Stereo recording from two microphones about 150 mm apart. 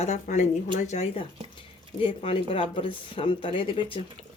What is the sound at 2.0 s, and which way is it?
Speech, 40° left (ahead or behind).